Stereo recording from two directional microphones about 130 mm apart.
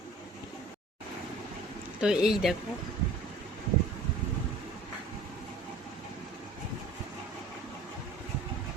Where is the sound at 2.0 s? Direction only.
5° right (ahead or behind).